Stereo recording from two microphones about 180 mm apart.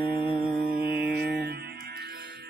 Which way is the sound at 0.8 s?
60° right (ahead or behind).